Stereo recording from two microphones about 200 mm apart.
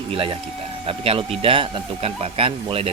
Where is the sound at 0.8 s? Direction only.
30° right (ahead or behind).